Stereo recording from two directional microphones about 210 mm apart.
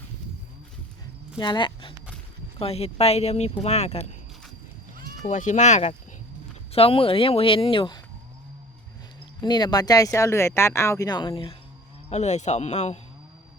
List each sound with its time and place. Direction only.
1.4 s speech: 20° left (ahead or behind)
5.2 s a man's voice: 35° left (ahead or behind)
9.4 s a man's voice: 20° left (ahead or behind)